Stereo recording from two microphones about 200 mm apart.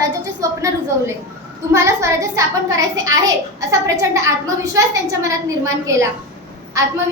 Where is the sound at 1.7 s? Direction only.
15° right (ahead or behind).